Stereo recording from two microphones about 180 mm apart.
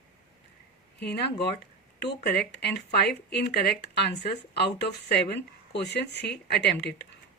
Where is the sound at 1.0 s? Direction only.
65° left (ahead or behind).